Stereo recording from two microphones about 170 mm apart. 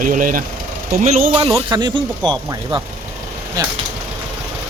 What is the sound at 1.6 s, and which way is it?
Speech, 25° right (ahead or behind).